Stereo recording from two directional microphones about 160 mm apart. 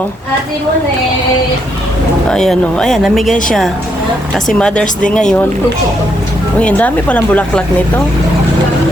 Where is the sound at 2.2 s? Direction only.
5° left (ahead or behind).